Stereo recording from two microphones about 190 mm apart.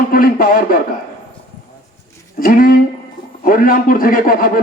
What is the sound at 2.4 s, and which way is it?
A man's voice, 50° left (ahead or behind).